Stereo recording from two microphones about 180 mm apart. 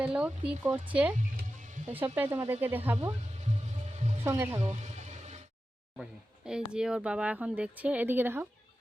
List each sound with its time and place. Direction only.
0.0 s speech: 5° right (ahead or behind)
1.5 s music: 45° right (ahead or behind)
2.0 s speech: 10° right (ahead or behind)
4.2 s speech: 10° right (ahead or behind)
4.6 s a sound: 40° right (ahead or behind)
6.0 s speech: 5° right (ahead or behind)